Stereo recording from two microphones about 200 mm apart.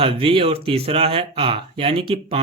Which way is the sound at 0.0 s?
30° right (ahead or behind).